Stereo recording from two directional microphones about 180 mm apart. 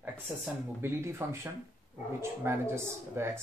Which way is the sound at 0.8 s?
15° right (ahead or behind).